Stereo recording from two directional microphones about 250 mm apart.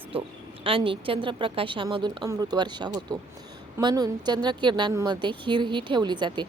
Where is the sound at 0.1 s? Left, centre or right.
Right.